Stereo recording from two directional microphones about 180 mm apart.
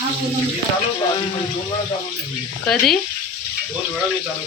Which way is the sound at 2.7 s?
Centre (ahead or behind).